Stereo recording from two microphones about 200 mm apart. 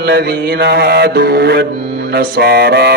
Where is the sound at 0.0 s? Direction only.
55° right (ahead or behind).